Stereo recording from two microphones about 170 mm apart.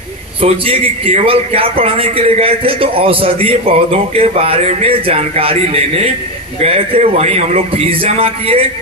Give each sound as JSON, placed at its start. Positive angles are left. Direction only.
{"t": 0.4, "sound": "a man's voice", "side_deg": -35}